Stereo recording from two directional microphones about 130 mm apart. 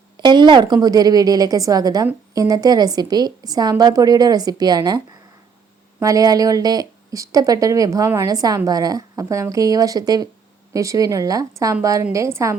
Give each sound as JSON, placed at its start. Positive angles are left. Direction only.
{"t": 0.2, "sound": "a woman's voice", "side_deg": -35}